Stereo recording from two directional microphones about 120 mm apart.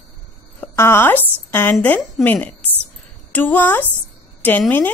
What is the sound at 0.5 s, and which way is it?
A woman's voice, 20° left (ahead or behind).